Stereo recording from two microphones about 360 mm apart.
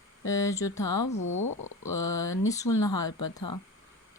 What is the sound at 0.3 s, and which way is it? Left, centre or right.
Speech, centre.